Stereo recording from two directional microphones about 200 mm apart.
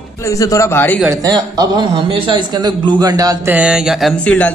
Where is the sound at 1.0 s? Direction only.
15° right (ahead or behind).